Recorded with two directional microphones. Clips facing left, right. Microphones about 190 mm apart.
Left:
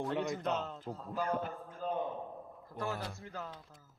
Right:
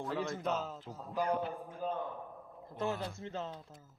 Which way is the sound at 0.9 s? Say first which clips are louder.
Right 2 dB; 15° right (ahead or behind).